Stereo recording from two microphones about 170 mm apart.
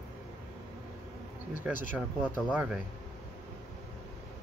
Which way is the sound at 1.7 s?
10° right (ahead or behind).